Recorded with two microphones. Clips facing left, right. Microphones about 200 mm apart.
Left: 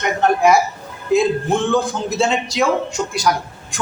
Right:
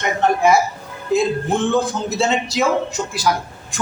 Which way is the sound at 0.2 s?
Centre (ahead or behind).